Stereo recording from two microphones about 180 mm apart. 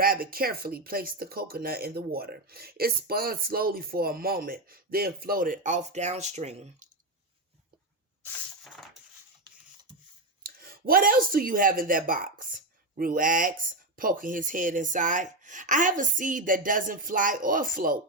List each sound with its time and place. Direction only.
0.0 s speech: 55° right (ahead or behind); by 6.8 s 40° right (ahead or behind)
8.2 s a sound: centre (ahead or behind)
10.4 s speech: 55° right (ahead or behind)